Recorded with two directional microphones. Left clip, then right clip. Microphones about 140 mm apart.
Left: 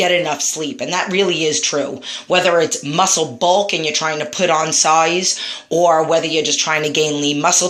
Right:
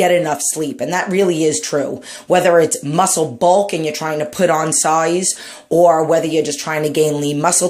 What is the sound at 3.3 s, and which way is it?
Speech, 65° right (ahead or behind).